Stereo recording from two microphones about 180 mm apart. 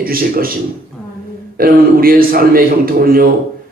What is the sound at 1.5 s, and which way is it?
A man's voice, 55° right (ahead or behind).